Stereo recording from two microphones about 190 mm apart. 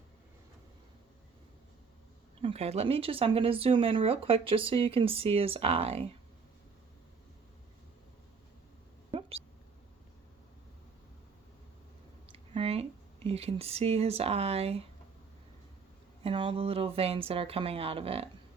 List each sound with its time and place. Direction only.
2.4 s speech: 30° right (ahead or behind)
12.5 s speech: 30° right (ahead or behind)
16.2 s speech: 25° right (ahead or behind)